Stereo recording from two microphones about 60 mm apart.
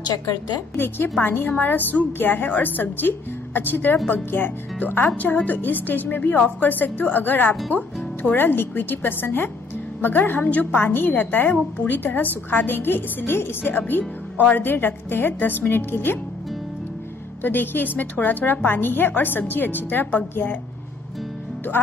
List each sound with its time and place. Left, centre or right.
0.7 s a woman's voice: left
11.5 s a woman's voice: left
12.0 s a woman's voice: left
17.4 s a woman's voice: left
21.7 s a woman's voice: left